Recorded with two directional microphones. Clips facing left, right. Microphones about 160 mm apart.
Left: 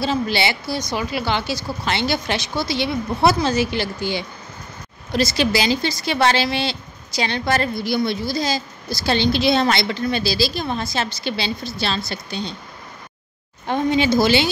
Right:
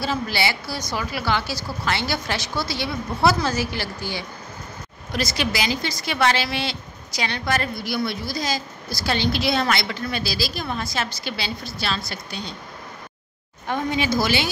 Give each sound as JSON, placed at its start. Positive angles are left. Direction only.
{"t": 0.0, "sound": "a woman's voice", "side_deg": 25}
{"t": 13.7, "sound": "a woman's voice", "side_deg": 25}